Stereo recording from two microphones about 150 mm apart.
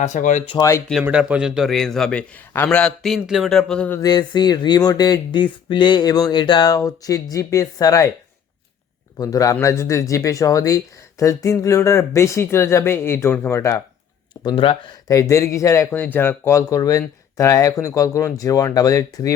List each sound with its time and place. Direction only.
0.0 s speech: 55° left (ahead or behind)
1.0 s speech: 10° right (ahead or behind); by 4.0 s 10° left (ahead or behind)
4.0 s speech: 25° left (ahead or behind)
9.1 s speech: 25° left (ahead or behind)
14.4 s speech: 35° left (ahead or behind)
15.0 s speech: 20° left (ahead or behind)